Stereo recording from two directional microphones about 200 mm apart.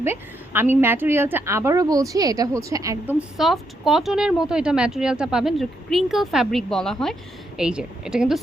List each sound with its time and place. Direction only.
0.0 s a woman's voice: 10° right (ahead or behind)
3.2 s speech: centre (ahead or behind)